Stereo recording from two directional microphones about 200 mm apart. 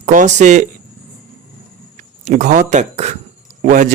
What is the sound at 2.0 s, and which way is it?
A man's voice, 40° right (ahead or behind).